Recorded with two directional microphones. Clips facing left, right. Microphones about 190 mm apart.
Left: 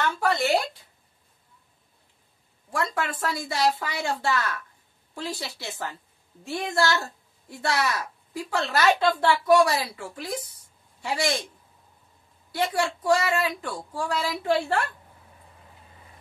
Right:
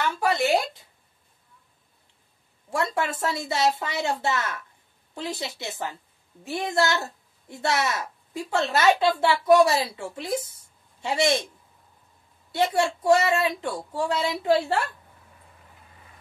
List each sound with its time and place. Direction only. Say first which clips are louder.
0.0 s a sound: even; 10° right (ahead or behind)
2.7 s a woman's voice: right 2 dB; 25° right (ahead or behind)
9.0 s a woman's voice: even; 10° right (ahead or behind)
9.5 s speech: right 3 dB; 20° right (ahead or behind)
12.5 s speech: right 3 dB; 25° right (ahead or behind)